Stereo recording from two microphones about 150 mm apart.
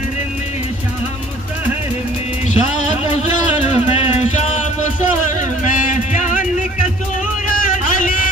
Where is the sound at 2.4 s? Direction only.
55° left (ahead or behind).